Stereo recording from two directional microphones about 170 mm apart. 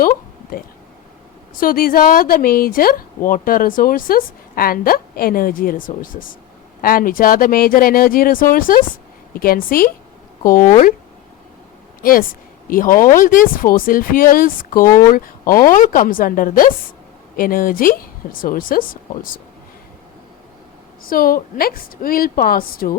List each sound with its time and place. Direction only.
1.5 s speech: 55° left (ahead or behind)
12.0 s speech: 55° left (ahead or behind)
21.0 s speech: 55° left (ahead or behind)